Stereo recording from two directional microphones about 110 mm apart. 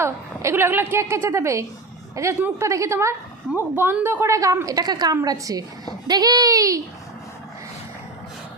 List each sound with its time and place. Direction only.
0.0 s a woman's voice: 20° right (ahead or behind)